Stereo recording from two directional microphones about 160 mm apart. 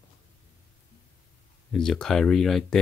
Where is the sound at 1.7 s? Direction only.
5° left (ahead or behind).